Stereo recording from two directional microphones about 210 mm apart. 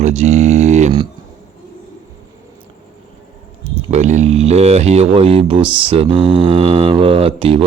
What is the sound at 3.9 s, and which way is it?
Speech, 35° right (ahead or behind).